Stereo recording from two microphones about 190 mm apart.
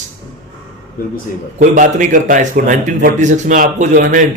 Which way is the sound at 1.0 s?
50° left (ahead or behind).